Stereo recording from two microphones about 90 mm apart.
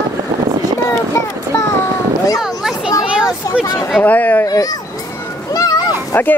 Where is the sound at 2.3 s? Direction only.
5° right (ahead or behind).